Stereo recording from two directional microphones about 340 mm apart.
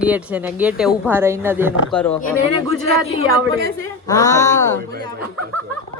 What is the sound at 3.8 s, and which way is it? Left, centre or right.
Speech, centre.